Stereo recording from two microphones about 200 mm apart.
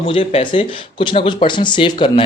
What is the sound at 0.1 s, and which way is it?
Speech, 30° left (ahead or behind).